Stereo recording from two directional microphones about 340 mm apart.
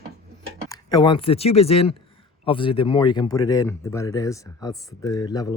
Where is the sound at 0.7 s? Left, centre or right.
Centre.